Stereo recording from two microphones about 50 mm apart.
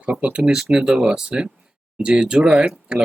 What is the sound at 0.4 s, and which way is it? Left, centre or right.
Speech, centre.